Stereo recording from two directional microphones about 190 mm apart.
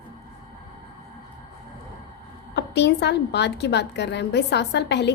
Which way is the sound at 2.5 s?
65° left (ahead or behind).